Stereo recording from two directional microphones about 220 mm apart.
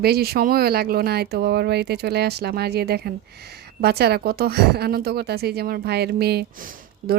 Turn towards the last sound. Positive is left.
turn(degrees=-40)  # may be behind; listen again after turning